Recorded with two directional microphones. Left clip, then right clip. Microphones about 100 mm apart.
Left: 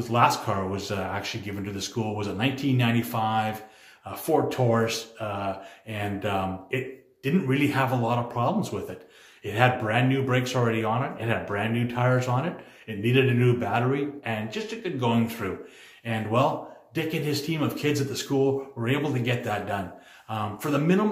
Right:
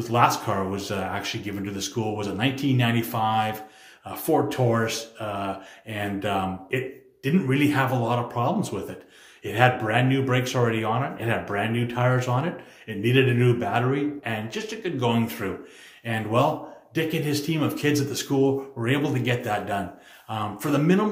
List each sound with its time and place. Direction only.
0.0 s speech: 20° right (ahead or behind)